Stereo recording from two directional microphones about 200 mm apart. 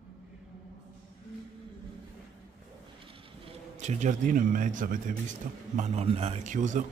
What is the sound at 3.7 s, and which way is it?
A man's voice, 35° right (ahead or behind).